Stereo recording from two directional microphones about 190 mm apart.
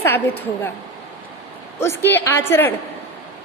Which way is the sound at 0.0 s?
10° left (ahead or behind).